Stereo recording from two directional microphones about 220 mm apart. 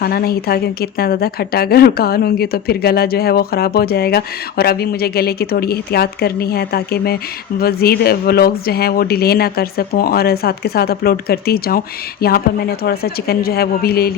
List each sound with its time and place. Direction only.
0.0 s a woman's voice: 45° left (ahead or behind)